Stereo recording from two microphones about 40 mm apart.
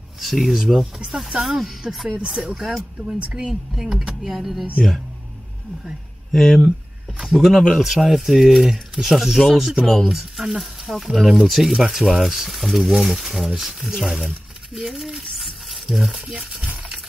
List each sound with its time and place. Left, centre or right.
0.2 s speech: centre
0.9 s speech: centre
1.7 s speech: centre
2.2 s speech: centre
2.5 s speech: centre
3.1 s speech: centre
4.2 s speech: centre
6.3 s speech: centre
15.3 s stir: centre
16.3 s speech: centre